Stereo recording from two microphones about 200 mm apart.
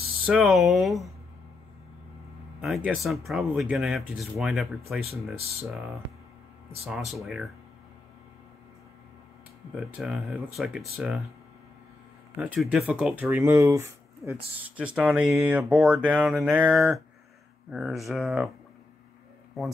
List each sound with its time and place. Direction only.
0.3 s speech: centre (ahead or behind)
2.6 s speech: centre (ahead or behind)
5.0 s speech: 30° right (ahead or behind)
7.1 s speech: centre (ahead or behind)
9.9 s speech: centre (ahead or behind)
12.4 s speech: 5° right (ahead or behind)